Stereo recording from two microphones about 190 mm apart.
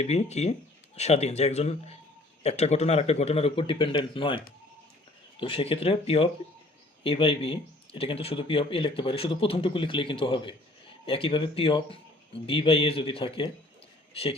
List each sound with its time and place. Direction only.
0.0 s speech: 35° left (ahead or behind)
5.4 s speech: 30° left (ahead or behind)